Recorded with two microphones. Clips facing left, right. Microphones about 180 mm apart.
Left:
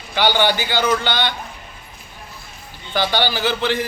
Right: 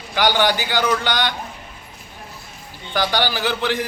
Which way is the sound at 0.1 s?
10° right (ahead or behind).